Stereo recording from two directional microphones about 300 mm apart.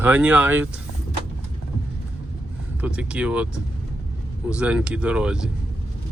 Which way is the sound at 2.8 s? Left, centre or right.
Centre.